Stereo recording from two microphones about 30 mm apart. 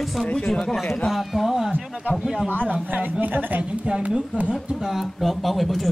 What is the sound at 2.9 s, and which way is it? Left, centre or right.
Speech, right.